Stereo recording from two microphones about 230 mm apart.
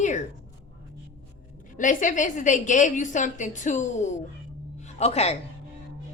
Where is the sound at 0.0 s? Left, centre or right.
Left.